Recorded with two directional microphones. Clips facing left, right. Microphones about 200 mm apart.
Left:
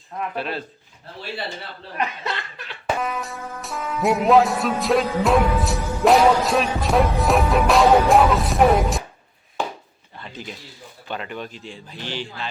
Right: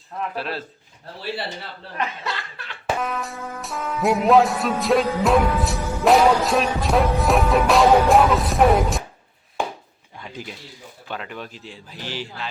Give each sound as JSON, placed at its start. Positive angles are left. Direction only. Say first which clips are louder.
{"t": 0.3, "sound": "music", "louder": "left 2 dB", "side_deg": 0}
{"t": 2.0, "sound": "chuckle", "louder": "left 1 dB", "side_deg": 20}
{"t": 3.0, "sound": "music", "louder": "even", "side_deg": 0}
{"t": 10.2, "sound": "a sound", "louder": "right 1 dB", "side_deg": -10}
{"t": 11.1, "sound": "music", "louder": "left 2 dB", "side_deg": 0}